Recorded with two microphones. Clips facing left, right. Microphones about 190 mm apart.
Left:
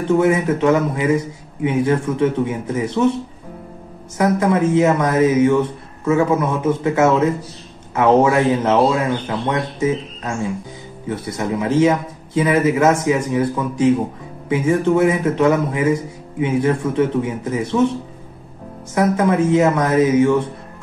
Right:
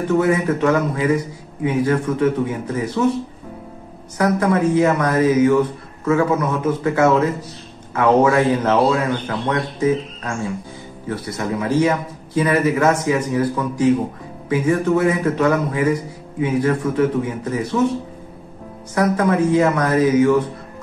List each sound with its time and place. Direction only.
0.1 s a man's voice: 25° left (ahead or behind)
4.2 s a man's voice: 20° left (ahead or behind)
18.9 s a man's voice: 20° left (ahead or behind)